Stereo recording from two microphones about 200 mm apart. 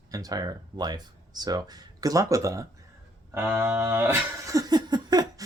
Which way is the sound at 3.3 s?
10° right (ahead or behind).